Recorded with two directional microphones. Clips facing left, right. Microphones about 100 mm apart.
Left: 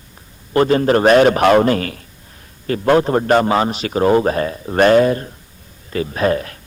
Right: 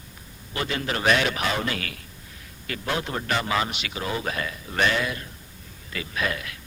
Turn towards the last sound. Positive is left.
turn(degrees=40)  # may be behind; listen again after turning